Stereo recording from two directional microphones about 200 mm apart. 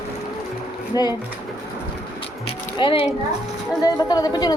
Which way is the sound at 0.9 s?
20° left (ahead or behind).